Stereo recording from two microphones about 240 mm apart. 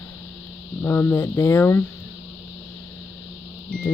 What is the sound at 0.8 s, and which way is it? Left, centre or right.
Speech, centre.